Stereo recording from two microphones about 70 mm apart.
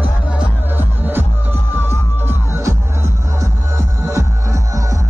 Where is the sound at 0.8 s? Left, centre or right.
Right.